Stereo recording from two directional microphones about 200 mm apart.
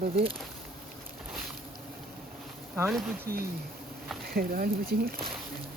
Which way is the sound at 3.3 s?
50° right (ahead or behind).